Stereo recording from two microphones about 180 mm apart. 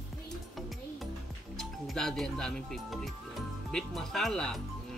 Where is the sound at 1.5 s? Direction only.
Centre (ahead or behind).